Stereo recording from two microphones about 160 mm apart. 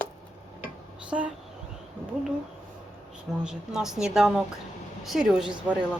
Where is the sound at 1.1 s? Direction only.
10° right (ahead or behind).